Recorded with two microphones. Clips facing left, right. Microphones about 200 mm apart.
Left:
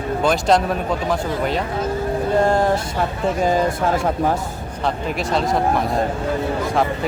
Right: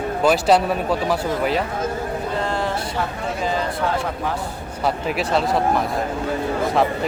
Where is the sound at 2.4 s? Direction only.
45° left (ahead or behind).